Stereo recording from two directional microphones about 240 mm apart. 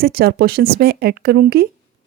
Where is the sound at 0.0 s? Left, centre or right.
Right.